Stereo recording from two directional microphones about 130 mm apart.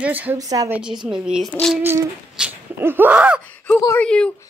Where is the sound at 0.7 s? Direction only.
5° right (ahead or behind).